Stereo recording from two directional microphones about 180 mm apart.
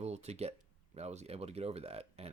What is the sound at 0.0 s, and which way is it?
Speech, 35° right (ahead or behind).